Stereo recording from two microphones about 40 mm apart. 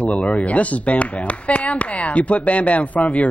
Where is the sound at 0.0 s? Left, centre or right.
Left.